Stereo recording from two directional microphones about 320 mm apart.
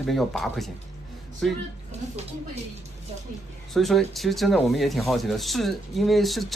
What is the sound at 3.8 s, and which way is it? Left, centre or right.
Speech, centre.